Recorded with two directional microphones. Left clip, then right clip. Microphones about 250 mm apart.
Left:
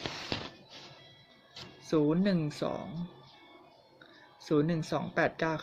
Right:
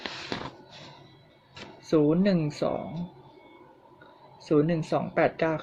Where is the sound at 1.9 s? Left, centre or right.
Centre.